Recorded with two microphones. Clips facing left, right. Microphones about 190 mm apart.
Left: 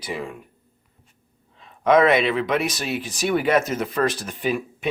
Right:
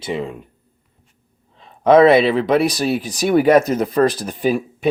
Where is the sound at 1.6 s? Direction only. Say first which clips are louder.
Right 6 dB; 30° right (ahead or behind).